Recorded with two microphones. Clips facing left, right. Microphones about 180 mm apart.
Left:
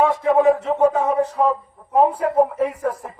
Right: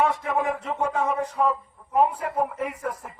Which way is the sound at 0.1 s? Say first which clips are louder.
Left 10 dB; 25° left (ahead or behind).